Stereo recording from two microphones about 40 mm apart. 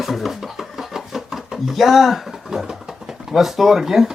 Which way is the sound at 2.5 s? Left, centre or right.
Centre.